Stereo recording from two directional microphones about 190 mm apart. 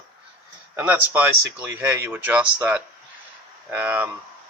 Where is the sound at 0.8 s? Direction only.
10° right (ahead or behind).